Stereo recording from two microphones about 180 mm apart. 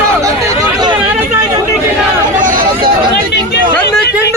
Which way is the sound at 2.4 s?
50° right (ahead or behind).